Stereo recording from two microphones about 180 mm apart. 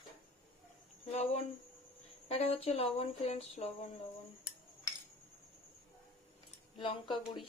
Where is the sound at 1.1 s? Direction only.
35° left (ahead or behind).